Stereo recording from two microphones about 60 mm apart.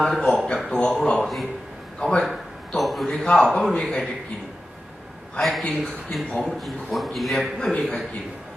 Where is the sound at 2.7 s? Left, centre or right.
Centre.